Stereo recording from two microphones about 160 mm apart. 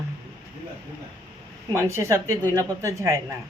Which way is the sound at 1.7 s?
20° right (ahead or behind).